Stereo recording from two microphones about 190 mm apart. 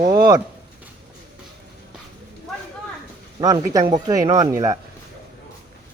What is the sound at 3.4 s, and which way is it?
Speech, 20° right (ahead or behind).